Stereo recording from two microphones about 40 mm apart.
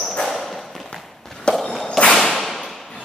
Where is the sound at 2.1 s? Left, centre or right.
Centre.